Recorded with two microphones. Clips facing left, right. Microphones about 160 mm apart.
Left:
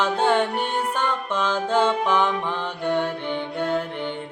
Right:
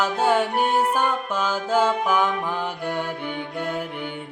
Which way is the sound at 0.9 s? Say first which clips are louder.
Right 1 dB; 10° right (ahead or behind).